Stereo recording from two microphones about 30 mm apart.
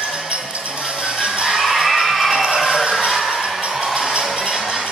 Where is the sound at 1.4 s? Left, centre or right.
Centre.